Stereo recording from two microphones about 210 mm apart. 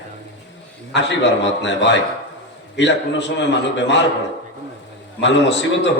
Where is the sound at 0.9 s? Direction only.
55° left (ahead or behind).